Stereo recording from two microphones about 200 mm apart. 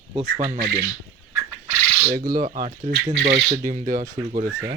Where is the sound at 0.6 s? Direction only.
50° right (ahead or behind).